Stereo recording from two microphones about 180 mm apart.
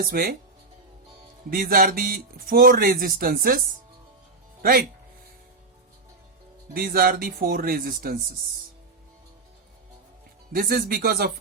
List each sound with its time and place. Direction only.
0.1 s speech: 60° right (ahead or behind)
1.5 s speech: 50° right (ahead or behind)
4.6 s speech: 55° right (ahead or behind)
6.7 s speech: 55° right (ahead or behind)
10.5 s speech: 55° right (ahead or behind)